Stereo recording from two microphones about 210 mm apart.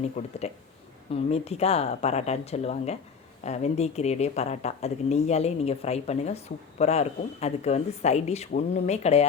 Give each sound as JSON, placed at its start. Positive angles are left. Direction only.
{"t": 0.2, "sound": "speech", "side_deg": 30}